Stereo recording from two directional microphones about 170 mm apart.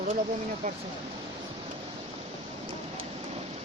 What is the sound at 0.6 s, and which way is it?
Speech, 45° right (ahead or behind).